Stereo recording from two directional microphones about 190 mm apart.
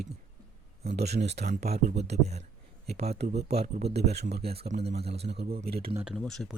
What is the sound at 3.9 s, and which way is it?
Speech, 60° right (ahead or behind).